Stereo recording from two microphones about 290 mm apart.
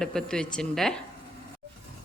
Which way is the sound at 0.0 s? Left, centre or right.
Centre.